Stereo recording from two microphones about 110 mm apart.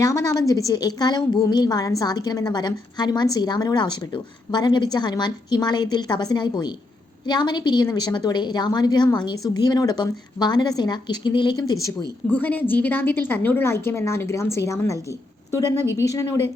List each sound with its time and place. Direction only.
0.0 s a woman's voice: 30° left (ahead or behind); by 11.5 s 45° left (ahead or behind)
12.3 s a woman's voice: 15° left (ahead or behind)